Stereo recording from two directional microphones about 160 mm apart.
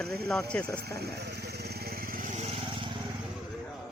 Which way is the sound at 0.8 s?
80° right.